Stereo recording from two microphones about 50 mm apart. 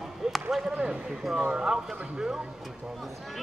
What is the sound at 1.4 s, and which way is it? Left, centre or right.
Speech, centre.